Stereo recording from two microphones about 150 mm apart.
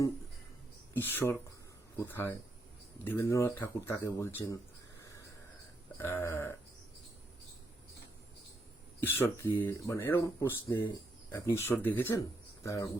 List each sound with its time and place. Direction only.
0.9 s speech: 15° left (ahead or behind)
6.0 s speech: 15° left (ahead or behind)
9.0 s speech: 15° left (ahead or behind)